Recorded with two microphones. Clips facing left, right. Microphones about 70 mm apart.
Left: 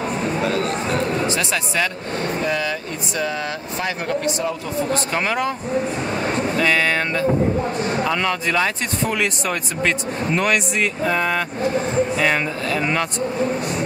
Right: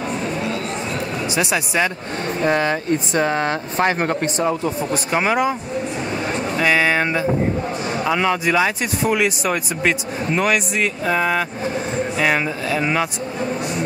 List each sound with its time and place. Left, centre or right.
1.2 s speech: centre
2.4 s speech: right
4.9 s speech: centre
6.6 s speech: centre